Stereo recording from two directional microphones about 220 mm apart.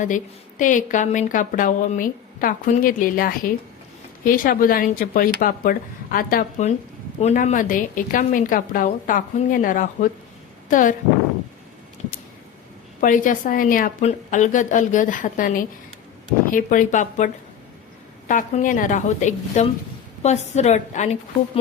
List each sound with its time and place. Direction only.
0.6 s a woman's voice: 35° left (ahead or behind)
13.0 s a woman's voice: 35° left (ahead or behind)